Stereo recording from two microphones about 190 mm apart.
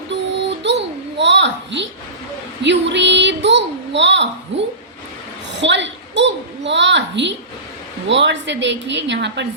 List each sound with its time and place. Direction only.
0.1 s child singing: 70° right (ahead or behind)
1.2 s a sound: 70° right (ahead or behind)
8.0 s a woman's voice: 70° right (ahead or behind)